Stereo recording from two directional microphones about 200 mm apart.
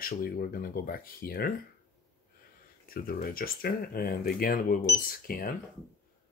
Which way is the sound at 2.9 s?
45° left (ahead or behind).